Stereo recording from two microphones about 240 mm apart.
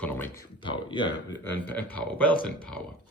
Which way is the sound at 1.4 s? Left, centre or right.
Centre.